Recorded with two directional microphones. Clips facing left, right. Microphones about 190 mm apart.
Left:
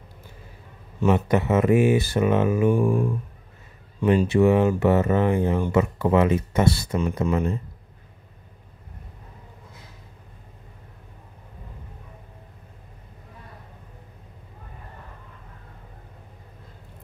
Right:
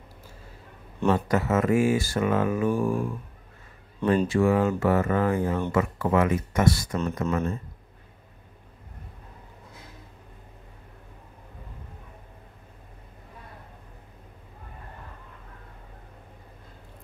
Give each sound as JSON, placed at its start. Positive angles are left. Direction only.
{"t": 1.1, "sound": "speech", "side_deg": 20}
{"t": 4.0, "sound": "speech", "side_deg": 10}
{"t": 4.3, "sound": "speech", "side_deg": 20}
{"t": 7.2, "sound": "speech", "side_deg": 15}